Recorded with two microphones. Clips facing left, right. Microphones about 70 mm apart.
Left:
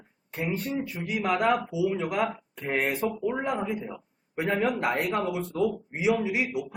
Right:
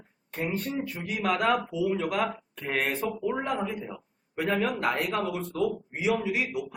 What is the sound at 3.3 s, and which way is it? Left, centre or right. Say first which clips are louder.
Speech: right 1 dB; centre.